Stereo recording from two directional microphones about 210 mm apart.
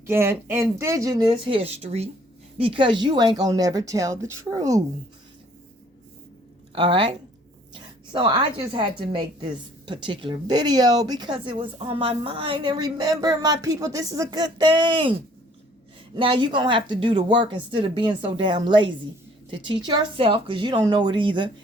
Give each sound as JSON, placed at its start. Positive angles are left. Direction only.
{"t": 0.0, "sound": "speech", "side_deg": -10}
{"t": 6.7, "sound": "a woman's voice", "side_deg": -25}
{"t": 16.1, "sound": "a woman's voice", "side_deg": -25}